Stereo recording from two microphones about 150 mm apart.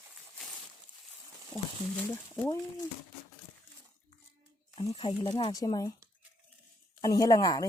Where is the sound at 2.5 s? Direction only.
20° left (ahead or behind).